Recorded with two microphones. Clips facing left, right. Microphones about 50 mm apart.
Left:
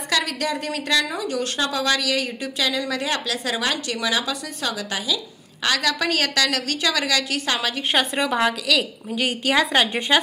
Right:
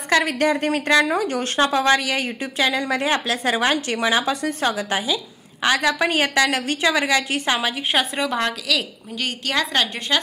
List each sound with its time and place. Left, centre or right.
0.1 s a woman's voice: right
7.9 s a woman's voice: centre